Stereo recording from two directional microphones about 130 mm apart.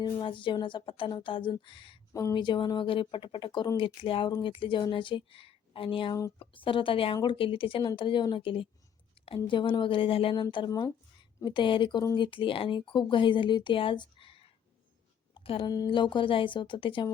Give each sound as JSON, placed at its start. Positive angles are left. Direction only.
{"t": 0.0, "sound": "speech", "side_deg": 40}
{"t": 9.2, "sound": "a sound", "side_deg": 45}
{"t": 9.5, "sound": "speech", "side_deg": 40}
{"t": 10.7, "sound": "speech", "side_deg": 25}
{"t": 11.4, "sound": "speech", "side_deg": 40}